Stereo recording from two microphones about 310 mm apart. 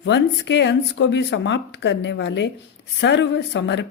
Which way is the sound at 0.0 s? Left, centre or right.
Left.